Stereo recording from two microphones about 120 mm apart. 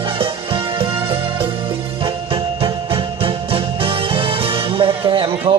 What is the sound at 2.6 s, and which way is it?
Music, 50° right (ahead or behind).